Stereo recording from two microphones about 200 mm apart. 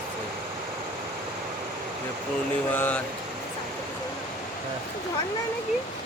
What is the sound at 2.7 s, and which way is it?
Speech, 10° left (ahead or behind).